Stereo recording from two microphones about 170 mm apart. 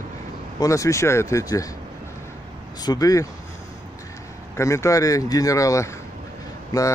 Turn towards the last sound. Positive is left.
turn(degrees=20)  # may be behind; listen again after turning